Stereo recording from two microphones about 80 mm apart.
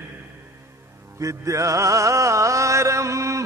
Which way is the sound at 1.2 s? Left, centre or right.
Right.